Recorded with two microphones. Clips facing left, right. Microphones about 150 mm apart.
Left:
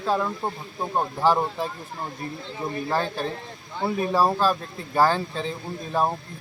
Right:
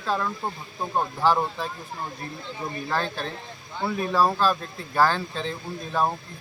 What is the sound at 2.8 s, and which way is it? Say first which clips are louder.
Speech: left 2 dB; 10° left (ahead or behind).